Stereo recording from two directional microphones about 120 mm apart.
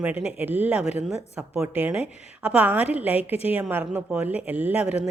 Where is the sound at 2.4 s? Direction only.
10° right (ahead or behind).